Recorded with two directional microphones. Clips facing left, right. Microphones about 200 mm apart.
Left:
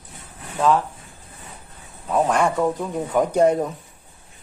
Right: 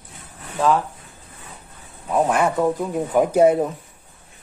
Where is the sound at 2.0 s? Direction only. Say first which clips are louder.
Right 1 dB; 5° right (ahead or behind).